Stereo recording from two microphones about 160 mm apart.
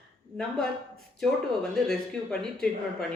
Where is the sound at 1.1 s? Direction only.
5° left (ahead or behind).